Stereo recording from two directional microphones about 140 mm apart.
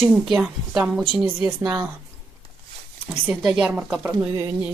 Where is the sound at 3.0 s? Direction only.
15° right (ahead or behind).